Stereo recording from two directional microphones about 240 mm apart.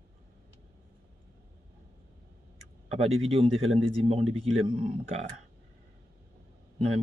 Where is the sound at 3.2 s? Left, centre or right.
Right.